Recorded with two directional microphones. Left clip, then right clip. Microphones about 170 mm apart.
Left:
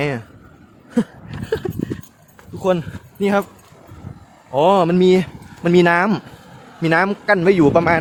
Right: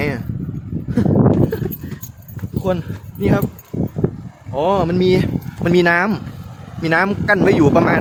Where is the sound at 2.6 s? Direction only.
35° left (ahead or behind).